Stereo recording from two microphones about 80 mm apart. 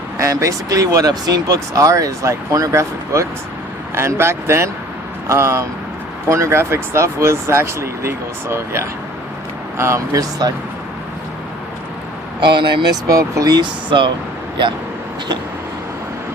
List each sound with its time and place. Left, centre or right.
0.2 s speech: right
12.4 s speech: right
12.9 s speech: right
13.6 s speech: right